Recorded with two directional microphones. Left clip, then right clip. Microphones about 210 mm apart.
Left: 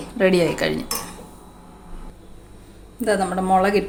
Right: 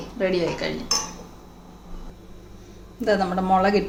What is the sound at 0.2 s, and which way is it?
Speech, 35° left (ahead or behind).